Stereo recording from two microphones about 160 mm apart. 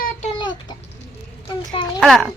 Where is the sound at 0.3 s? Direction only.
25° left (ahead or behind).